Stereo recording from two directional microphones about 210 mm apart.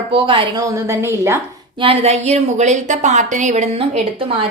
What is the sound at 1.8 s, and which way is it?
A woman's voice, 30° right (ahead or behind).